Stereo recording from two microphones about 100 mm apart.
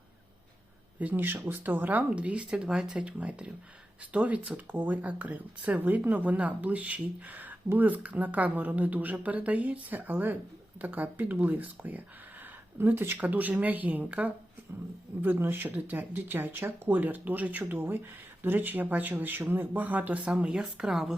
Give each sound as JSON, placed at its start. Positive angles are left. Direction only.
{"t": 0.9, "sound": "speech", "side_deg": -15}